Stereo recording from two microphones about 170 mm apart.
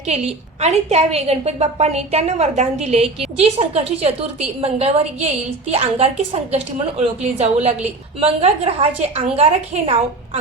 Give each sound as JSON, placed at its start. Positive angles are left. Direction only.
{"t": 0.0, "sound": "a woman's voice", "side_deg": -40}